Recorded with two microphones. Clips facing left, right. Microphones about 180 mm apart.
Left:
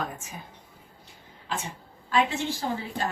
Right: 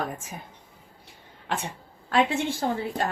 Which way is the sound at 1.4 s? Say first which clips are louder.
Right 3 dB; 60° right (ahead or behind).